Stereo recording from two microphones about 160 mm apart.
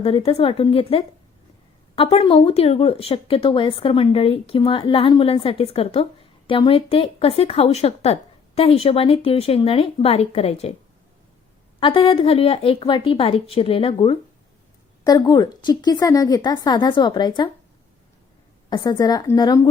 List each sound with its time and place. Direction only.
0.0 s a woman's voice: 35° left (ahead or behind)
11.8 s a woman's voice: 30° left (ahead or behind)
15.0 s a woman's voice: 25° left (ahead or behind)
18.7 s a woman's voice: 25° left (ahead or behind)